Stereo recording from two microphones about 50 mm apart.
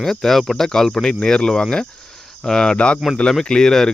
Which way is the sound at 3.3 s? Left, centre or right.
Centre.